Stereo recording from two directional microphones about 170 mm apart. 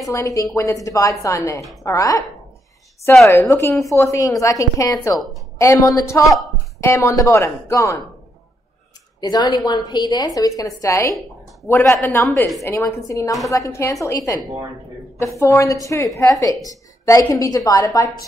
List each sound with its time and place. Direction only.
0.1 s a woman's voice: 20° left (ahead or behind)
3.3 s a woman's voice: 15° left (ahead or behind)
9.2 s a woman's voice: 20° left (ahead or behind)
12.3 s a woman's voice: centre (ahead or behind)
12.6 s a woman's voice: 15° left (ahead or behind)
15.3 s a woman's voice: 20° left (ahead or behind)